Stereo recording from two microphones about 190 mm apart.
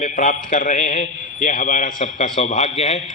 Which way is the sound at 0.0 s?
40° left (ahead or behind).